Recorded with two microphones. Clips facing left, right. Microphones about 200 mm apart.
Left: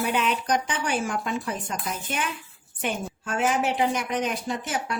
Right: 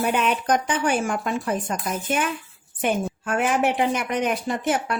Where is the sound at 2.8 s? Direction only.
60° right (ahead or behind).